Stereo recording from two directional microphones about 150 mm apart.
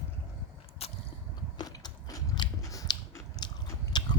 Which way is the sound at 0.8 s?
40° left (ahead or behind).